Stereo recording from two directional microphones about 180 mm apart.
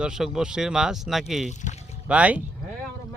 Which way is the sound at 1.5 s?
40° left (ahead or behind).